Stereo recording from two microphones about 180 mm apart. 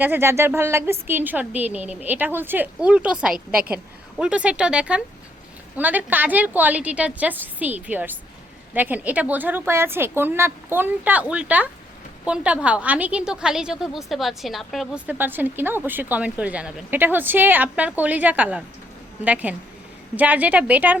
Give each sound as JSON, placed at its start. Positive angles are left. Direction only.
{"t": 0.0, "sound": "a woman's voice", "side_deg": -10}